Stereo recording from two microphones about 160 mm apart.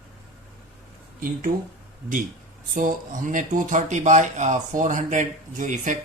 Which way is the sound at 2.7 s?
55° right (ahead or behind).